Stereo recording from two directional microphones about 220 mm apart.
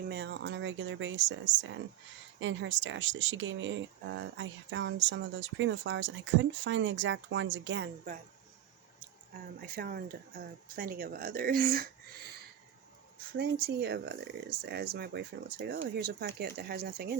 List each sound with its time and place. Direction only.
0.1 s speech: 50° right (ahead or behind)
9.6 s speech: 40° right (ahead or behind)